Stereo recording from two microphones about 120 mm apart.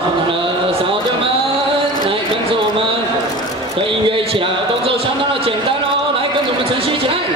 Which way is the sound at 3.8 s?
50° right (ahead or behind).